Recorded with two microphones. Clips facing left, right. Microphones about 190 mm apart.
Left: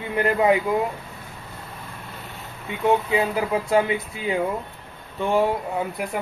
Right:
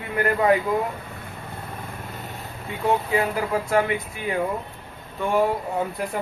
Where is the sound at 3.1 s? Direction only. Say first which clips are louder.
Left 1 dB; 20° left (ahead or behind).